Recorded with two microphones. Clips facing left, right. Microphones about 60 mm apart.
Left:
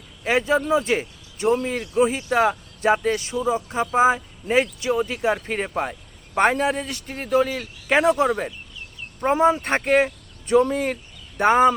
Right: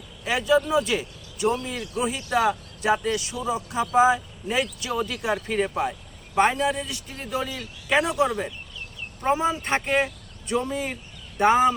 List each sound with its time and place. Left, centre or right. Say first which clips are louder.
0.3 s speech: left 2 dB; left